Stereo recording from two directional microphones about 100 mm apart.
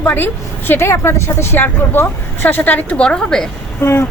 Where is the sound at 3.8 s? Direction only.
25° left (ahead or behind).